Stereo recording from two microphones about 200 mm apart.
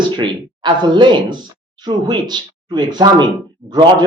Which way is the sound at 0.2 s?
25° right (ahead or behind).